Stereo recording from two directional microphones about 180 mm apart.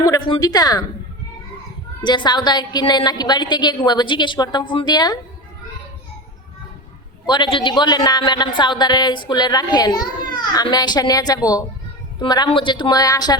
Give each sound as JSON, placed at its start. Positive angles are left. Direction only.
{"t": 0.0, "sound": "a woman's voice", "side_deg": 25}
{"t": 2.0, "sound": "a woman's voice", "side_deg": 25}
{"t": 7.3, "sound": "a woman's voice", "side_deg": 25}